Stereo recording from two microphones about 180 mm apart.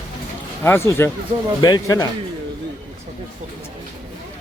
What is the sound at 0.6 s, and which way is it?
A man's voice, 15° left (ahead or behind).